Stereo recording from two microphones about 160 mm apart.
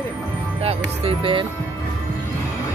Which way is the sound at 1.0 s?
35° right (ahead or behind).